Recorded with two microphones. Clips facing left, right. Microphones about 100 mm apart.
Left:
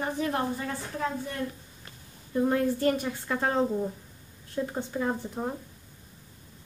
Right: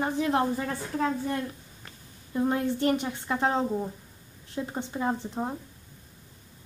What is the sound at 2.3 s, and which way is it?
A woman's voice, 20° right (ahead or behind).